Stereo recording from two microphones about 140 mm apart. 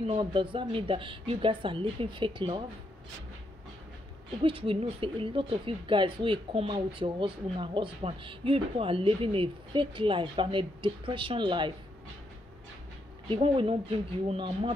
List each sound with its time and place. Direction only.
0.2 s speech: 35° right (ahead or behind)
4.4 s speech: 40° right (ahead or behind)
13.3 s speech: 40° right (ahead or behind)